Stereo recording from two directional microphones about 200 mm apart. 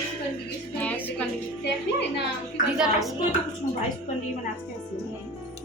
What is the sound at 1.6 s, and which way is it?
Speech, 60° left (ahead or behind).